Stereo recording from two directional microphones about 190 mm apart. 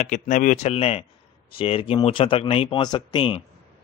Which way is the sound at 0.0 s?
40° left (ahead or behind).